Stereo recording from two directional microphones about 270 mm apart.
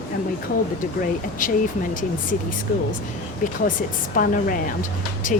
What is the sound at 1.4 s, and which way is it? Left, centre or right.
Speech, left.